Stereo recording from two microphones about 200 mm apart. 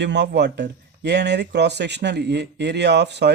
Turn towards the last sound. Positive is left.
turn(degrees=-60)  # may be behind; listen again after turning